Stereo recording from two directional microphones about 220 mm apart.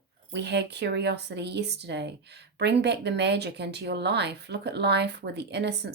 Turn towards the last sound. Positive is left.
turn(degrees=-50)  # may be behind; listen again after turning